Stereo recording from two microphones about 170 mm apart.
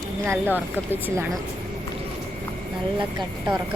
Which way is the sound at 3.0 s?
25° right (ahead or behind).